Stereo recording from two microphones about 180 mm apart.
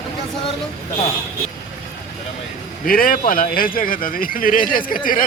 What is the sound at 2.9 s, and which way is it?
Speech, 50° left (ahead or behind).